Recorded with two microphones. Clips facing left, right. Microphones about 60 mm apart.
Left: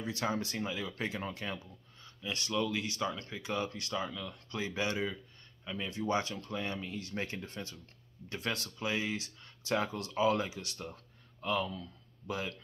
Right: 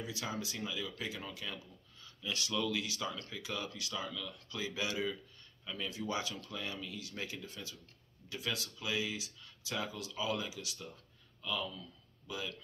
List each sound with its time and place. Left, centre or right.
0.0 s speech: left
5.9 s speech: left